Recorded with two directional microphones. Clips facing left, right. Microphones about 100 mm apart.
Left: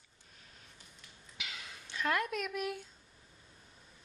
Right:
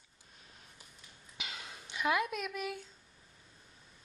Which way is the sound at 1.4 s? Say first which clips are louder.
Right 1 dB; 25° right (ahead or behind).